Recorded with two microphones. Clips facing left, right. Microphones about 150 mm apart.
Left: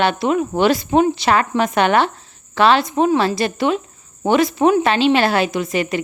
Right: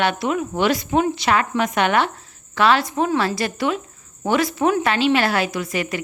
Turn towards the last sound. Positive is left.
turn(degrees=25)  # may be behind; listen again after turning